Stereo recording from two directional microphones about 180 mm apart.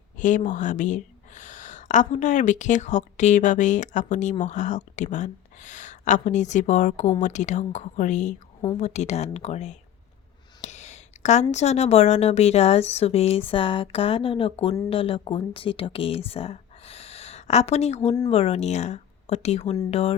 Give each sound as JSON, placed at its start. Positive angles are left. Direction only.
{"t": 0.2, "sound": "speech", "side_deg": 45}
{"t": 10.6, "sound": "a sound", "side_deg": 40}
{"t": 11.5, "sound": "speech", "side_deg": 35}